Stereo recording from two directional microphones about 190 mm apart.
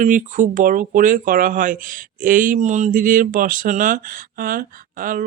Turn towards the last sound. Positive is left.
turn(degrees=-45)  # may be behind; listen again after turning